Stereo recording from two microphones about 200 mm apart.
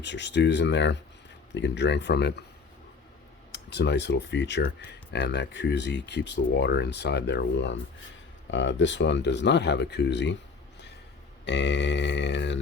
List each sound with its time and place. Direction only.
0.0 s speech: 60° left (ahead or behind)
3.5 s speech: 60° left (ahead or behind)
11.4 s speech: 60° left (ahead or behind)